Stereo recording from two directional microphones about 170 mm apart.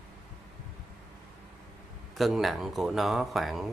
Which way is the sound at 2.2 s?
Centre (ahead or behind).